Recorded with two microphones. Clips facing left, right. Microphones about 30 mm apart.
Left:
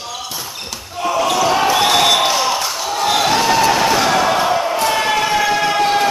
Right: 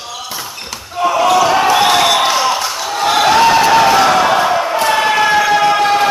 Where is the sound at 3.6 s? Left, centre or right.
Right.